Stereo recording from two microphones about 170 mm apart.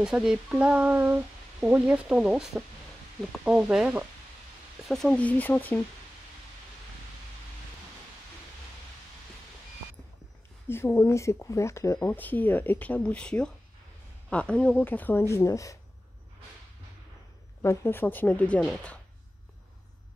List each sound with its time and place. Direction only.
0.0 s speech: 5° right (ahead or behind)
10.7 s speech: 15° left (ahead or behind)
17.6 s speech: 15° left (ahead or behind)